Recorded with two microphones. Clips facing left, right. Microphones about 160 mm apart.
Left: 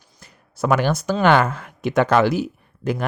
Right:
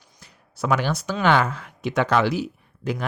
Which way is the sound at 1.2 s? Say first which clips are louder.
Left 3 dB; 50° left (ahead or behind).